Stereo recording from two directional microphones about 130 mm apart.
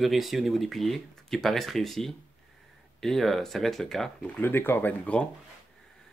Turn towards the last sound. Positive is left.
turn(degrees=10)  # may be behind; listen again after turning